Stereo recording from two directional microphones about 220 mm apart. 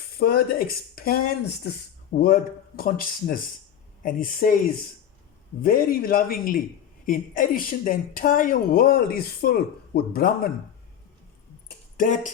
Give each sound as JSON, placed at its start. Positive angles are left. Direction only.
{"t": 0.2, "sound": "speech", "side_deg": 45}
{"t": 5.6, "sound": "speech", "side_deg": 40}
{"t": 11.9, "sound": "speech", "side_deg": 35}